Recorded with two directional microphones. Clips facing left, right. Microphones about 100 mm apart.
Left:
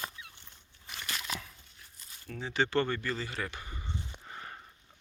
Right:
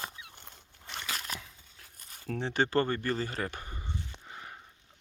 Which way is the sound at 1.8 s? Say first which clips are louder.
Right 5 dB; 55° right (ahead or behind).